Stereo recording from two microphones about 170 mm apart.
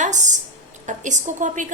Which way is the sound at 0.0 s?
45° right (ahead or behind).